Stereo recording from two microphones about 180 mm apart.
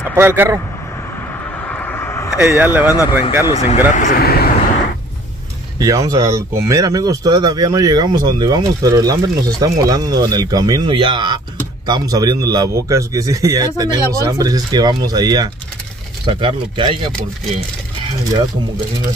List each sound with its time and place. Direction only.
0.1 s speech: 10° right (ahead or behind)
1.7 s vehicle: 10° left (ahead or behind)
2.5 s speech: 10° right (ahead or behind)
3.4 s speech: 35° left (ahead or behind)
3.9 s speech: 50° left (ahead or behind)
5.8 s speech: 20° right (ahead or behind)